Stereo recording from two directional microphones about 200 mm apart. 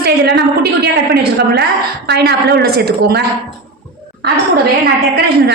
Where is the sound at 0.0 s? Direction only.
50° right (ahead or behind).